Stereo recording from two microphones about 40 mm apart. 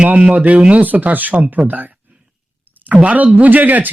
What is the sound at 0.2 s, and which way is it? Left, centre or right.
Speech, right.